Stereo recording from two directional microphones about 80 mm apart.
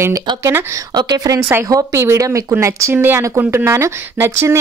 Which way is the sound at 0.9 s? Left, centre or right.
Right.